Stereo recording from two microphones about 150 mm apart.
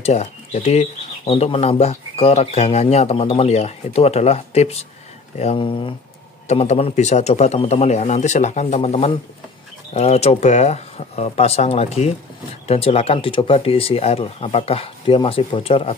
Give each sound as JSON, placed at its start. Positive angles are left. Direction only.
{"t": 0.0, "sound": "speech", "side_deg": 45}
{"t": 6.4, "sound": "speech", "side_deg": 50}